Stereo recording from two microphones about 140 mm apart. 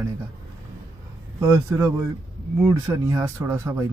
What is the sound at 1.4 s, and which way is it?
Speech, 20° right (ahead or behind).